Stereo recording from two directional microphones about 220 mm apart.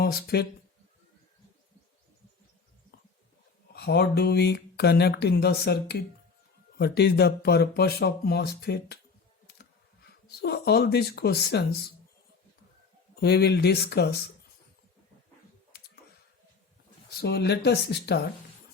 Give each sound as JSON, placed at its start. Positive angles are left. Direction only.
{"t": 0.0, "sound": "speech", "side_deg": 45}
{"t": 3.7, "sound": "speech", "side_deg": 45}
{"t": 10.0, "sound": "speech", "side_deg": 45}
{"t": 13.1, "sound": "speech", "side_deg": 45}
{"t": 15.7, "sound": "computer keyboard", "side_deg": 45}
{"t": 17.2, "sound": "speech", "side_deg": 45}